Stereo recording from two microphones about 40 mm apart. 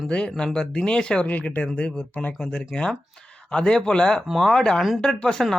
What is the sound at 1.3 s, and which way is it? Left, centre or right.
Speech, left.